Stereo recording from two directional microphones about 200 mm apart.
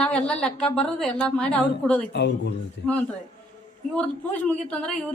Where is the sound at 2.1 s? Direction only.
60° left (ahead or behind).